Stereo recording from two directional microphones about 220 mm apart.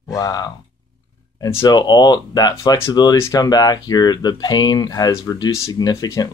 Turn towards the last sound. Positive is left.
turn(degrees=15)  # may be behind; listen again after turning